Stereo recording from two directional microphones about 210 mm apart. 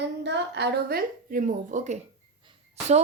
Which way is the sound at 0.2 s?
55° right (ahead or behind).